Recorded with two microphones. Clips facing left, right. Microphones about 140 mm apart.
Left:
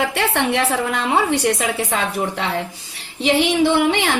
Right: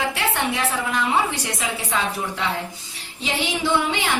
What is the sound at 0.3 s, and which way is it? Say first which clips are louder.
A woman's voice: left 5 dB; 65° left (ahead or behind).